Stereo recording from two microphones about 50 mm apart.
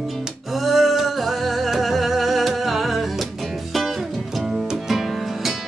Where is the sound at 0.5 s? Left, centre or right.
Centre.